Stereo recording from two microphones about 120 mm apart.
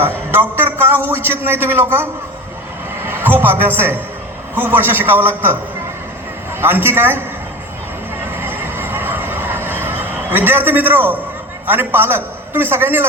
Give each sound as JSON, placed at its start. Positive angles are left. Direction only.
{"t": 0.0, "sound": "a man's voice", "side_deg": -20}
{"t": 3.0, "sound": "a sound", "side_deg": -20}
{"t": 4.5, "sound": "a man's voice", "side_deg": -15}
{"t": 6.6, "sound": "a man's voice", "side_deg": -20}
{"t": 8.4, "sound": "a sound", "side_deg": -15}
{"t": 11.6, "sound": "a man's voice", "side_deg": -15}